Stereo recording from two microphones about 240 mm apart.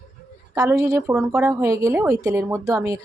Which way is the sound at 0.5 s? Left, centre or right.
Centre.